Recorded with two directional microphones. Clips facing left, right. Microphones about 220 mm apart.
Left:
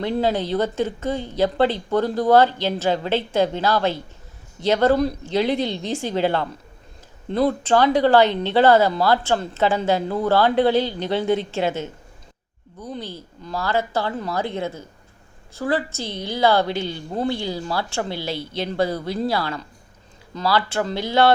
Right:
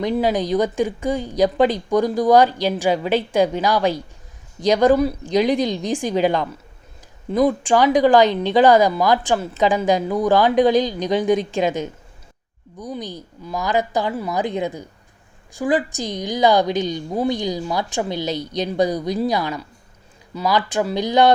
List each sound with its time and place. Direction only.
0.0 s speech: 15° right (ahead or behind)